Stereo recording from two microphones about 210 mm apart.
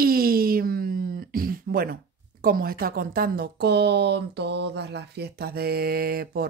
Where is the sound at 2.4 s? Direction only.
45° right (ahead or behind).